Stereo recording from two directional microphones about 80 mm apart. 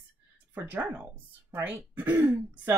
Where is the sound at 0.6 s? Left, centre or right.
Right.